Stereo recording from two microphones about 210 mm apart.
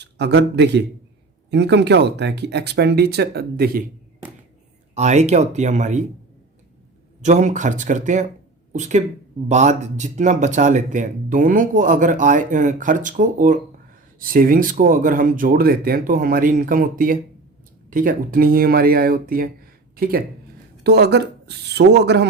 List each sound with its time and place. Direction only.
0.0 s a man's voice: 55° right (ahead or behind)
4.9 s speech: 35° right (ahead or behind)
7.2 s speech: 35° right (ahead or behind); by 22.3 s 50° right (ahead or behind)